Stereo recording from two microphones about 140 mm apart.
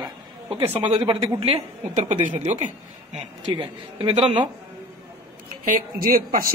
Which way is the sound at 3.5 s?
35° right (ahead or behind).